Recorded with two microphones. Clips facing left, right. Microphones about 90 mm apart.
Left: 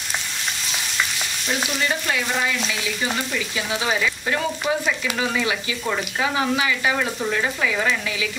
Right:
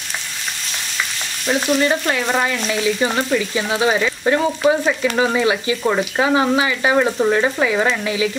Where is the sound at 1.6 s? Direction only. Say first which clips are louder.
Right 8 dB; 50° right (ahead or behind).